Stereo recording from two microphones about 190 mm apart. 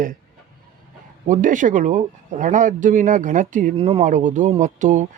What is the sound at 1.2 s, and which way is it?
Speech, 45° right (ahead or behind).